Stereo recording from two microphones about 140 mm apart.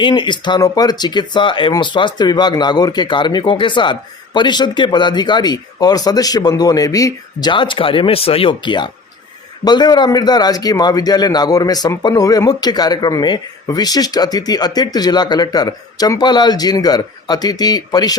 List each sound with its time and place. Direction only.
0.0 s a man's voice: 35° left (ahead or behind)